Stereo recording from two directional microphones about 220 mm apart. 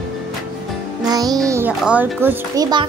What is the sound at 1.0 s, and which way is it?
A child's voice, 15° right (ahead or behind).